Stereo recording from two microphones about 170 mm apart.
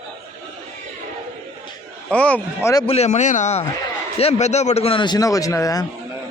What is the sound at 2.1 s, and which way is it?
Speech, 5° left (ahead or behind).